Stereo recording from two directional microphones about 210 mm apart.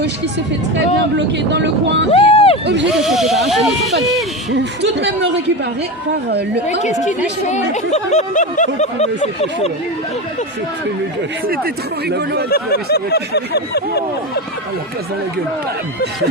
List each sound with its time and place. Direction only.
1.1 s speech: 55° right (ahead or behind)
2.1 s a sound: 25° left (ahead or behind)
3.0 s speech: centre (ahead or behind)
4.5 s speech: 55° right (ahead or behind)
6.8 s speech: 35° left (ahead or behind)
11.4 s speech: 45° right (ahead or behind)
12.5 s speech: 45° left (ahead or behind)